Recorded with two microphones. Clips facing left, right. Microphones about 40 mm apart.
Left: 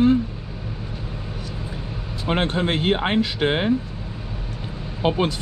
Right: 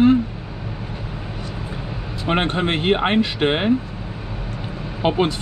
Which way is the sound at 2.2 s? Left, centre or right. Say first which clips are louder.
Right 2 dB; right.